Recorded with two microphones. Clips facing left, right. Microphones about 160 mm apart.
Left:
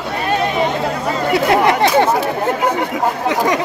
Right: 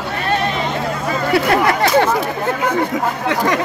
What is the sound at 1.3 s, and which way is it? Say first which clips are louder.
Speech: left 2 dB; 20° left (ahead or behind).